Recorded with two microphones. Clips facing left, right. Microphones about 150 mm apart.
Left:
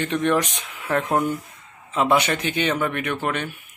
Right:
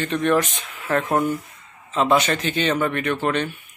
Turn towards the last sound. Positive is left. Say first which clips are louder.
# right 3 dB
turn(degrees=5)  # may be behind; listen again after turning